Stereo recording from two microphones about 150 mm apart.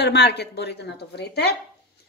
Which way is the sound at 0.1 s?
90° left.